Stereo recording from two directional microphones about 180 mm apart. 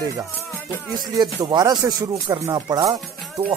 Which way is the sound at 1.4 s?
20° right (ahead or behind).